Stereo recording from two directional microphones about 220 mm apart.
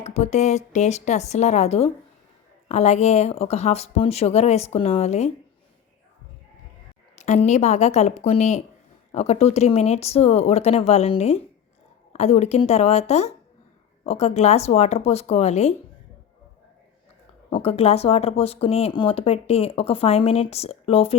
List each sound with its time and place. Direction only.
0.0 s speech: 30° left (ahead or behind)
7.2 s speech: 30° left (ahead or behind)
17.5 s speech: 25° left (ahead or behind)